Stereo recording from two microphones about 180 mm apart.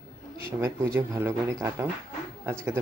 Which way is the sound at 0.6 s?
15° right (ahead or behind).